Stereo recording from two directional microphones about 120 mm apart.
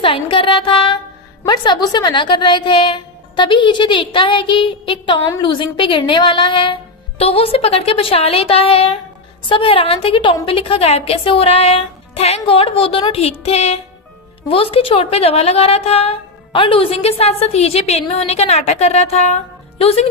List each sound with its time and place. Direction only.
0.0 s a woman's voice: 45° left (ahead or behind)
14.5 s a woman's voice: 50° left (ahead or behind)